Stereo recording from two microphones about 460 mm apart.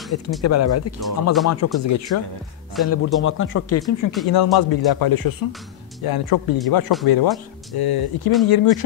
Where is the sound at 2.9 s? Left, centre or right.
Left.